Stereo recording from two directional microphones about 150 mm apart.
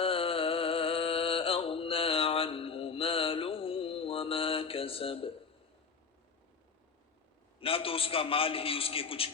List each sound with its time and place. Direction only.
0.0 s music: 40° left (ahead or behind)
7.6 s a man's voice: 40° left (ahead or behind)